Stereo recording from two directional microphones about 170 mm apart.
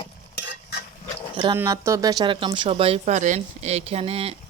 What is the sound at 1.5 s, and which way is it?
Speech, 15° right (ahead or behind).